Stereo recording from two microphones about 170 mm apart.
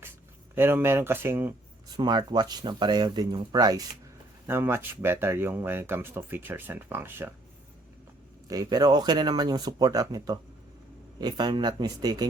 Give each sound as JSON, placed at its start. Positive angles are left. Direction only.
{"t": 0.5, "sound": "speech", "side_deg": -15}
{"t": 2.0, "sound": "speech", "side_deg": -25}
{"t": 8.4, "sound": "speech", "side_deg": -20}